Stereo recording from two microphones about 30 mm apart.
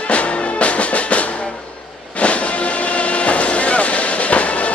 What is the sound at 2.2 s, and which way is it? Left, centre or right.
Vehicle, left.